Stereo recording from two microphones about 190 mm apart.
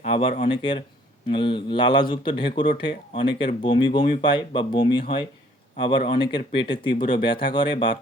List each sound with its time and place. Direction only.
0.0 s speech: 30° left (ahead or behind)